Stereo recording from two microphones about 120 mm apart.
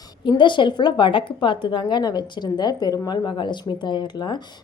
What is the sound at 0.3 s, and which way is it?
A woman's voice, 40° left (ahead or behind).